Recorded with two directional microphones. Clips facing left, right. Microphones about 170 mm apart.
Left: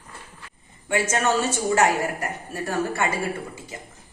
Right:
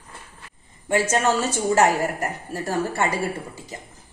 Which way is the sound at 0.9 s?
35° right (ahead or behind).